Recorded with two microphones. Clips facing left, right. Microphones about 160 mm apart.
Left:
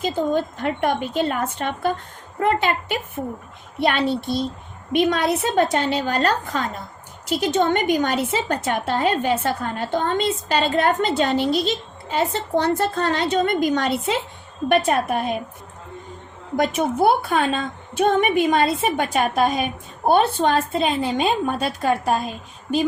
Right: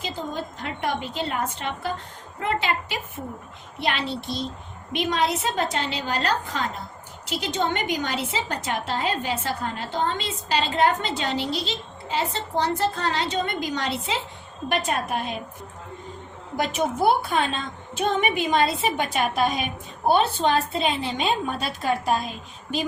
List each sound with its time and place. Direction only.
0.0 s a woman's voice: 55° left (ahead or behind)
16.6 s a woman's voice: 50° left (ahead or behind)